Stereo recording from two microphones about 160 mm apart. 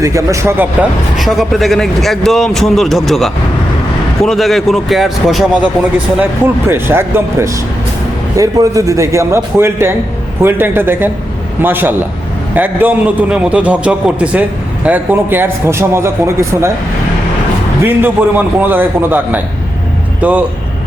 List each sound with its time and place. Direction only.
0.0 s a man's voice: 20° right (ahead or behind)
1.2 s a man's voice: centre (ahead or behind)
6.7 s a man's voice: 15° right (ahead or behind)
17.8 s a man's voice: 10° right (ahead or behind)